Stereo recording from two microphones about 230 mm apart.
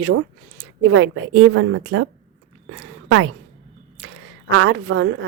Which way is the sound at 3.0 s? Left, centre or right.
Right.